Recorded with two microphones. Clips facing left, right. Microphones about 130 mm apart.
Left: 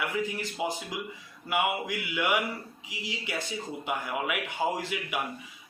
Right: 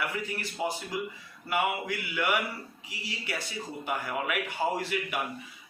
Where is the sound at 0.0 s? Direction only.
15° left (ahead or behind).